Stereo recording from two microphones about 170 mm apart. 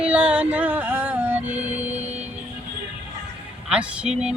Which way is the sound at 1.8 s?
40° right (ahead or behind).